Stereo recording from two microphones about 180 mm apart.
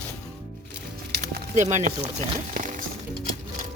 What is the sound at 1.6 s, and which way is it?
Speech, 40° right (ahead or behind).